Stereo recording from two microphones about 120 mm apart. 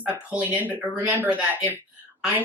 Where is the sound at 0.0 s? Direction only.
10° right (ahead or behind).